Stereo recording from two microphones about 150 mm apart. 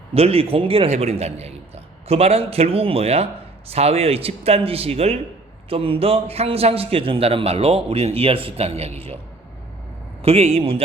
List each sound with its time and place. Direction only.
0.1 s a man's voice: 40° right (ahead or behind)
10.2 s a man's voice: 40° right (ahead or behind)